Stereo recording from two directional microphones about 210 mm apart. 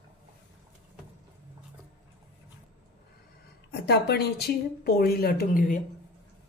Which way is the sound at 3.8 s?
50° left (ahead or behind).